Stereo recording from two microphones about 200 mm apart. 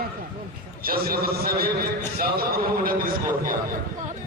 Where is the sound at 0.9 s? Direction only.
50° right (ahead or behind).